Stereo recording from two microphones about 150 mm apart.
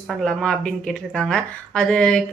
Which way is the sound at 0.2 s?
5° left (ahead or behind).